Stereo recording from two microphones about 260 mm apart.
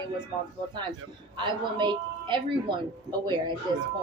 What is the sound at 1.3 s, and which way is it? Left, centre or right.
A woman's voice, centre.